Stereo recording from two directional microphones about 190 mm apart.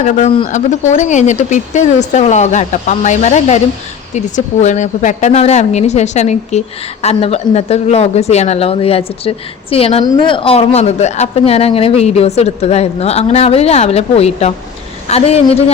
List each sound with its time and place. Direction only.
0.4 s speech: 40° left (ahead or behind)